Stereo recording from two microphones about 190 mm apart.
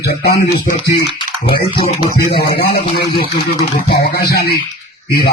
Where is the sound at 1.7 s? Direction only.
25° left (ahead or behind).